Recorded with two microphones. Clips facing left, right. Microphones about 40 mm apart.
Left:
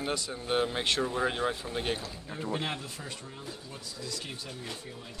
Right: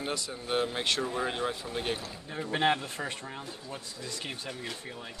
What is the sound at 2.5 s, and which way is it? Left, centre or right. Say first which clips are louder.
Speech: right 9 dB; right.